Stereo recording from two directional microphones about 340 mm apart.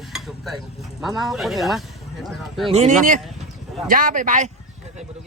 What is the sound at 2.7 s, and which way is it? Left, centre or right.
Speech, centre.